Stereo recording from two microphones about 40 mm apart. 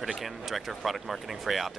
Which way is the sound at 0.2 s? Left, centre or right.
Centre.